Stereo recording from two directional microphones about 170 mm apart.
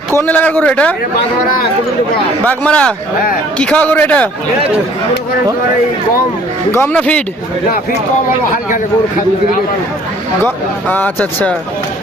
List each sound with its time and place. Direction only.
0.2 s a man's voice: 10° left (ahead or behind)
2.4 s a man's voice: 10° left (ahead or behind)
6.7 s a man's voice: 15° left (ahead or behind)
10.8 s a man's voice: 10° left (ahead or behind)